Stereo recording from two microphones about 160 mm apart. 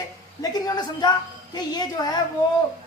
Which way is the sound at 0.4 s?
25° left (ahead or behind).